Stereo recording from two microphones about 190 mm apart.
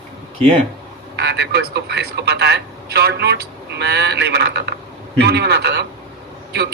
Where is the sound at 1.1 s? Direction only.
60° right (ahead or behind).